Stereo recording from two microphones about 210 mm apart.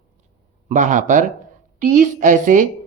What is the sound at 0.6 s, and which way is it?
A woman's voice, 35° right (ahead or behind).